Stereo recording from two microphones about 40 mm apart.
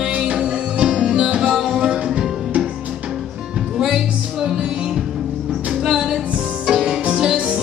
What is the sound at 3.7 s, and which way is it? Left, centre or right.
Music, centre.